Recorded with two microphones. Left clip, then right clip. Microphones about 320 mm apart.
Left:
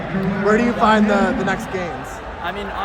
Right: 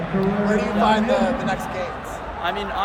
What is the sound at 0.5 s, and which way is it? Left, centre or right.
Speech, left.